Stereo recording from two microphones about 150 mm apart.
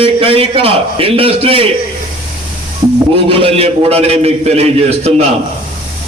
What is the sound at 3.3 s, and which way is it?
A man's voice, 40° right (ahead or behind).